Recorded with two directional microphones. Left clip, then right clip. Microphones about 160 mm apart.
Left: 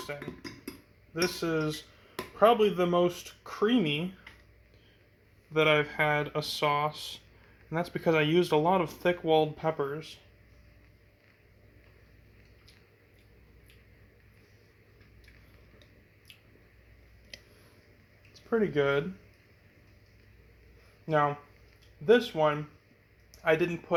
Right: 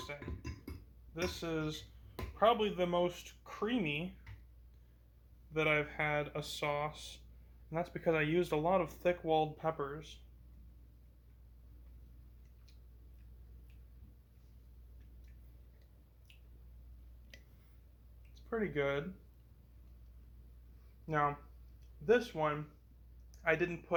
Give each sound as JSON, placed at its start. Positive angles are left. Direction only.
{"t": 1.1, "sound": "speech", "side_deg": 90}
{"t": 5.5, "sound": "speech", "side_deg": 55}
{"t": 18.5, "sound": "speech", "side_deg": 65}
{"t": 21.1, "sound": "speech", "side_deg": 55}
{"t": 23.3, "sound": "a sound", "side_deg": 55}